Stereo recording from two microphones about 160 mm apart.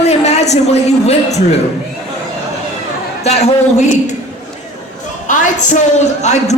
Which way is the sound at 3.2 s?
40° left (ahead or behind).